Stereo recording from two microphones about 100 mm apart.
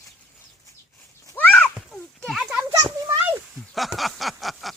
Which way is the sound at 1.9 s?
5° left (ahead or behind).